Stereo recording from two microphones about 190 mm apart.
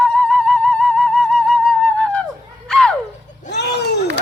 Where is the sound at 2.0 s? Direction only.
5° left (ahead or behind).